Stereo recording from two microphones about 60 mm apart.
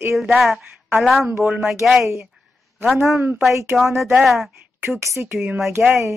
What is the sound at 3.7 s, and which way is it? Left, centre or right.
Speech, centre.